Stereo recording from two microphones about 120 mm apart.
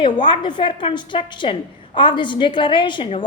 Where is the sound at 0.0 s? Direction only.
45° left (ahead or behind).